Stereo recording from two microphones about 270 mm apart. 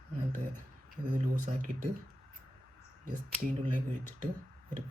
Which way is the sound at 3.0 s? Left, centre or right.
Right.